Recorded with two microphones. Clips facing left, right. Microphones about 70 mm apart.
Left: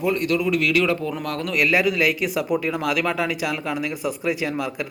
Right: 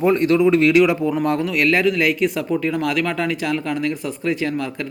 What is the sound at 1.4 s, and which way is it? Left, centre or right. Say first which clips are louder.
Speech: left 2 dB; centre.